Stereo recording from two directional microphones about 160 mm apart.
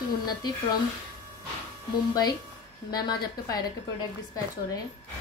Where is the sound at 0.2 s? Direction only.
25° left (ahead or behind).